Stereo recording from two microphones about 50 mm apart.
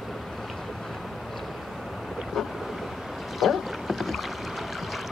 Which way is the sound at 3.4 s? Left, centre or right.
Centre.